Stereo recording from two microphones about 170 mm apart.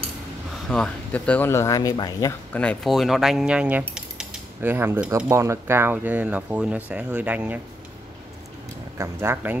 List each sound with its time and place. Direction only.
0.7 s speech: 5° left (ahead or behind); by 2.3 s 25° left (ahead or behind)
2.5 s speech: 5° left (ahead or behind)
3.9 s cutlery: 5° right (ahead or behind)
5.3 s speech: 15° right (ahead or behind)
8.9 s speech: 15° right (ahead or behind)